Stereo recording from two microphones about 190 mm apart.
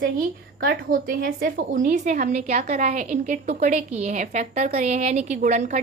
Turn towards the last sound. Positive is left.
turn(degrees=-40)  # may be behind; listen again after turning